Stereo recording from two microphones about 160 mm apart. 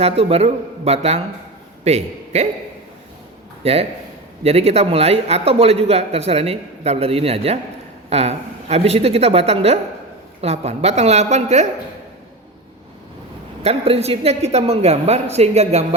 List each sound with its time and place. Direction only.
0.0 s a man's voice: 40° right (ahead or behind)
3.6 s a man's voice: 40° right (ahead or behind)
13.6 s a man's voice: 40° right (ahead or behind)